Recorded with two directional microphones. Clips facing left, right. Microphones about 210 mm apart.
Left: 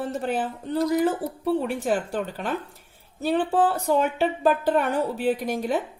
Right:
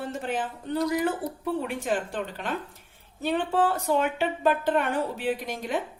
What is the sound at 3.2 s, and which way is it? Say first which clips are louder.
Speech: left 3 dB; 35° left (ahead or behind).